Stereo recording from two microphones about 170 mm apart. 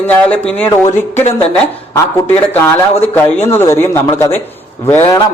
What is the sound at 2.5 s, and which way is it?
A man's voice, 15° left (ahead or behind).